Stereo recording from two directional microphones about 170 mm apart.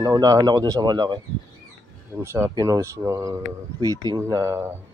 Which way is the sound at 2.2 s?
15° right (ahead or behind).